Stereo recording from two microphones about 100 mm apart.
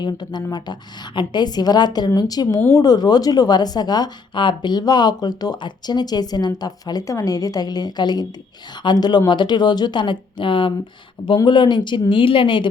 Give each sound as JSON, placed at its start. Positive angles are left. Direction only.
{"t": 0.0, "sound": "speech", "side_deg": 45}